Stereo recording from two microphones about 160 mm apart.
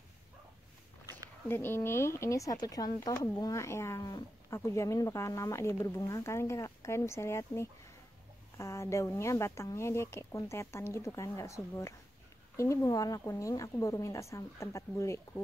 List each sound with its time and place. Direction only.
1.5 s a woman's voice: 15° left (ahead or behind)